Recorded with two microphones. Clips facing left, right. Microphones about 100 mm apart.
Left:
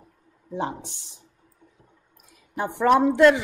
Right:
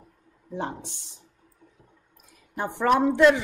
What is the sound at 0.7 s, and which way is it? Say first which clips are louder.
Speech: left 2 dB; 10° left (ahead or behind).